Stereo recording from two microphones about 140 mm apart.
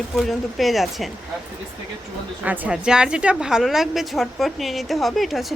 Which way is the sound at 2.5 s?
10° right (ahead or behind).